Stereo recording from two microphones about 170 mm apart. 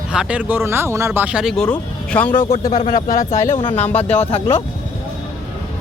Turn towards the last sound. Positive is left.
turn(degrees=35)  # may be behind; listen again after turning